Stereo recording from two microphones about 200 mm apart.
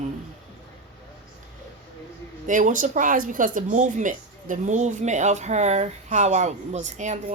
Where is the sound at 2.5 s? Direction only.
40° right (ahead or behind).